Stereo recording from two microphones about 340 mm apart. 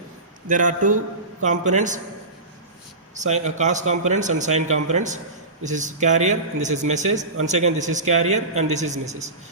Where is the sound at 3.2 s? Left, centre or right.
Right.